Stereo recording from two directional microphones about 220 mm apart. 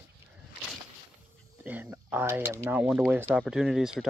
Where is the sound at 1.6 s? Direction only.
10° right (ahead or behind).